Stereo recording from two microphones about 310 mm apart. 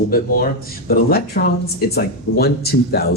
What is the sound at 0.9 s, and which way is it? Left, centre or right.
Speech, left.